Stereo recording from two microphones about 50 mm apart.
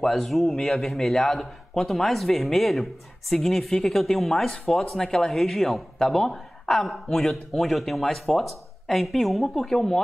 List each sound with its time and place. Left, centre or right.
0.0 s speech: centre